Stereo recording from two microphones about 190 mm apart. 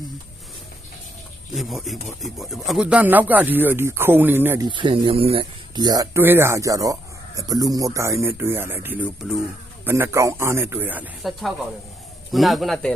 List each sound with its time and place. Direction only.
1.5 s speech: centre (ahead or behind)
4.7 s a man's voice: 25° right (ahead or behind); by 12.9 s centre (ahead or behind)